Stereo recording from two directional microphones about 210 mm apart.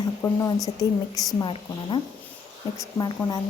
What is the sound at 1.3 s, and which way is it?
A woman's voice, 25° left (ahead or behind).